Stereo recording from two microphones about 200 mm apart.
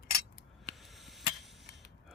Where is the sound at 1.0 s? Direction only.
Centre (ahead or behind).